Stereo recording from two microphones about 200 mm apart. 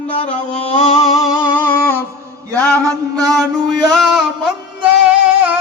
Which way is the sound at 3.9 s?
Centre (ahead or behind).